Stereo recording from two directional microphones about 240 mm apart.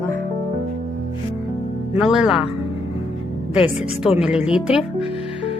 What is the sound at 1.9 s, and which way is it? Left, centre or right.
Speech, centre.